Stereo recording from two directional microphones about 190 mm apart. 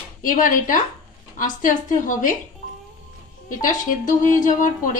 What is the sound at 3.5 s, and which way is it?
A woman's voice, 45° left (ahead or behind).